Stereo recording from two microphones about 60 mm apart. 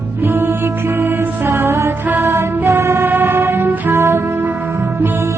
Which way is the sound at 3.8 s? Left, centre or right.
Right.